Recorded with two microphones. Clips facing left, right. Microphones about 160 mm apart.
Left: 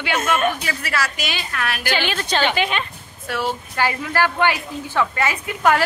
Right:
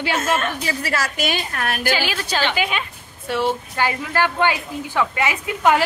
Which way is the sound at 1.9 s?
5° right (ahead or behind).